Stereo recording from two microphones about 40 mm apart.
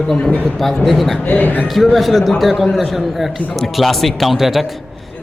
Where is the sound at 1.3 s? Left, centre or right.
Left.